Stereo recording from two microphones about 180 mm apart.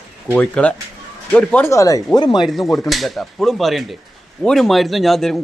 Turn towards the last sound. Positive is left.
turn(degrees=0)  # may be behind; listen again after turning